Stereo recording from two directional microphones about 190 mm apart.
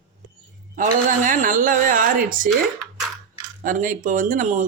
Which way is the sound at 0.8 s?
45° right (ahead or behind).